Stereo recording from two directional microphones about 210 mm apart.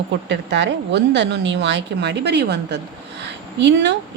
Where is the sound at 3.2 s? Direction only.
55° right (ahead or behind).